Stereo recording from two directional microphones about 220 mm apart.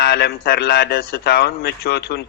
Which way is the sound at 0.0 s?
45° left (ahead or behind).